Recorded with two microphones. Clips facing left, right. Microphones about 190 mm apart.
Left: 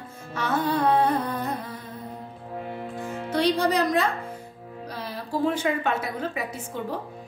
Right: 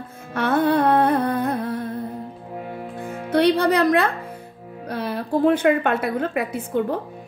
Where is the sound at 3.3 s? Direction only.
60° right (ahead or behind).